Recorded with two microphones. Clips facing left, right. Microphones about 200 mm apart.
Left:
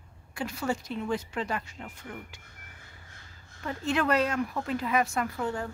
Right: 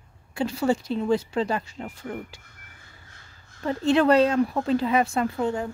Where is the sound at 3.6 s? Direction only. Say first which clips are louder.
Right 8 dB; 30° right (ahead or behind).